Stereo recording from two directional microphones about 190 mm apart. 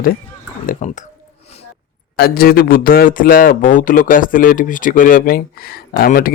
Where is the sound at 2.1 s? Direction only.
55° left (ahead or behind).